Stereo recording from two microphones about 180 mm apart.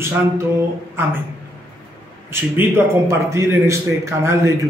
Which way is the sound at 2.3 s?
15° right (ahead or behind).